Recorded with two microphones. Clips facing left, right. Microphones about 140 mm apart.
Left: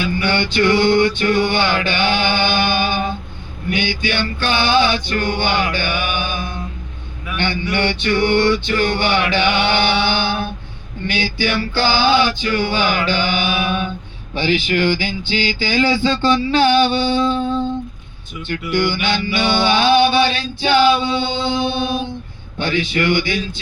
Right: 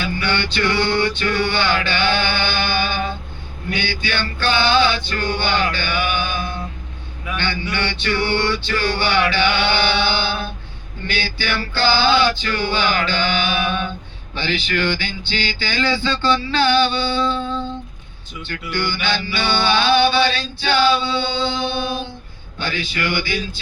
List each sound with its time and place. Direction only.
0.0 s music: 15° left (ahead or behind)
18.4 s music: 15° left (ahead or behind)